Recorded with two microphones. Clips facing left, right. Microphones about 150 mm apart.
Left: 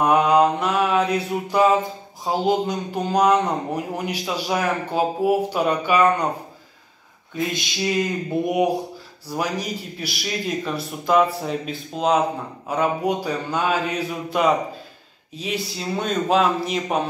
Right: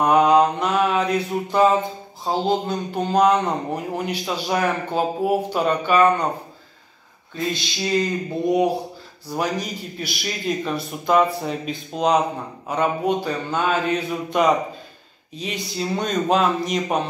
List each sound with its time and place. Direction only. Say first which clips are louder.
0.0 s mantra: right 1 dB; 5° left (ahead or behind)
2.2 s speech: left 1 dB; 10° left (ahead or behind)
7.3 s speech: left 1 dB; 15° left (ahead or behind)
9.3 s speech: right 1 dB; 5° left (ahead or behind)